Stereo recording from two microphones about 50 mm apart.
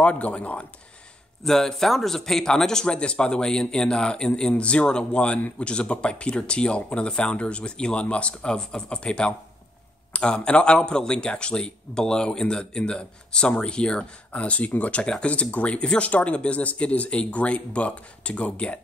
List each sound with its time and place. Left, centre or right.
0.0 s speech: left
1.4 s speech: centre; by 18.8 s left